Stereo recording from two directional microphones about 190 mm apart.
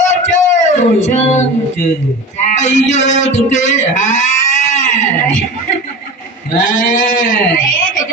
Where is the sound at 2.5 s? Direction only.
40° left (ahead or behind).